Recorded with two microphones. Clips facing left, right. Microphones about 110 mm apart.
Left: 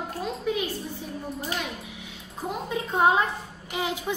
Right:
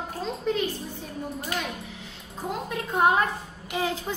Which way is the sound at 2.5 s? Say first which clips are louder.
Left 1 dB; 20° left (ahead or behind).